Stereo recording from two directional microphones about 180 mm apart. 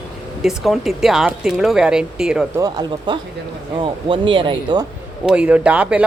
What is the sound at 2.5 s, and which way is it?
Speech, 20° right (ahead or behind).